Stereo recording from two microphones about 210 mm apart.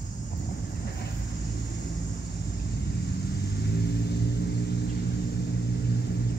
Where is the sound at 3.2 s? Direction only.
50° left (ahead or behind).